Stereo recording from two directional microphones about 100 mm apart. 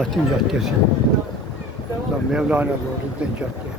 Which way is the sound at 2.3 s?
10° right (ahead or behind).